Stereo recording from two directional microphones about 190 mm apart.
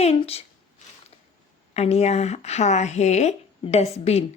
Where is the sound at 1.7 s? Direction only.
35° left (ahead or behind).